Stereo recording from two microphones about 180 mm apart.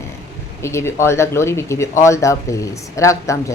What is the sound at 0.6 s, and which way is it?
Speech, 15° left (ahead or behind).